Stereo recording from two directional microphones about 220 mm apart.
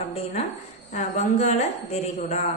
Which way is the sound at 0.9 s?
30° left (ahead or behind).